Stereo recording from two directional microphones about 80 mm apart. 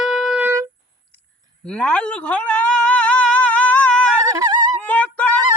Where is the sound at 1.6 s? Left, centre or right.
Centre.